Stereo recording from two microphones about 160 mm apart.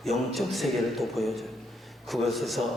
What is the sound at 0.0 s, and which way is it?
A man's voice, centre (ahead or behind).